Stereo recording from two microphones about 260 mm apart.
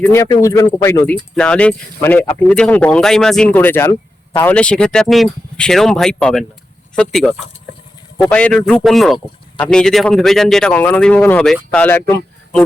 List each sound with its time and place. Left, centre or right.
0.0 s speech: centre